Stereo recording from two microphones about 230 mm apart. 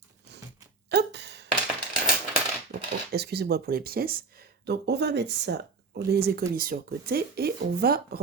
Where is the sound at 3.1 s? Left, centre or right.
Right.